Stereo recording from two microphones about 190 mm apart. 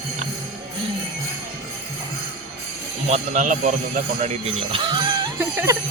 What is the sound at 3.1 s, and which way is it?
Speech, 40° right (ahead or behind).